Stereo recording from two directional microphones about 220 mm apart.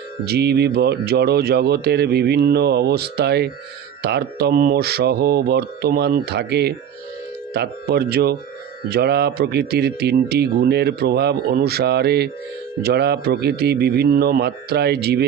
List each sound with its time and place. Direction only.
0.3 s speech: 45° right (ahead or behind)